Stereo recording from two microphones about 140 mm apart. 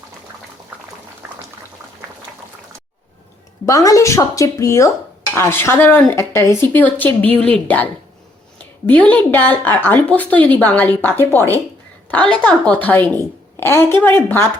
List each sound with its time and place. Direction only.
3.7 s speech: 25° left (ahead or behind)